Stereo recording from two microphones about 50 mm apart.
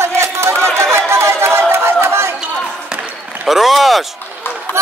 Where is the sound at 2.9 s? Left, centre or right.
Centre.